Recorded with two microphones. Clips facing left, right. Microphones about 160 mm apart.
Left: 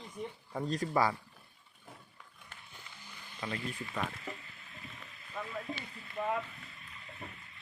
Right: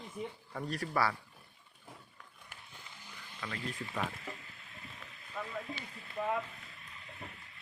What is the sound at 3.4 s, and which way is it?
Speech, 25° left (ahead or behind).